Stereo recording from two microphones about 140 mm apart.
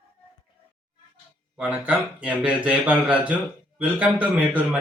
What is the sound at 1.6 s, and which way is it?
Speech, 10° right (ahead or behind).